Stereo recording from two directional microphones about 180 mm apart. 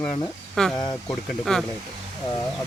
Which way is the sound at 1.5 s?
5° left (ahead or behind).